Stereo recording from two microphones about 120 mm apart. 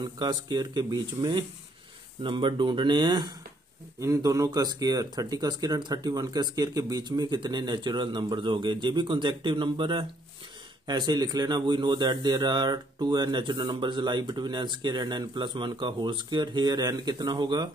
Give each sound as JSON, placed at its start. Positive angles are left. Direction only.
{"t": 0.0, "sound": "a man's voice", "side_deg": -35}
{"t": 4.0, "sound": "a man's voice", "side_deg": -30}